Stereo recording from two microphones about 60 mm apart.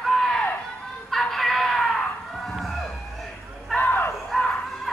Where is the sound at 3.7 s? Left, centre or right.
Left.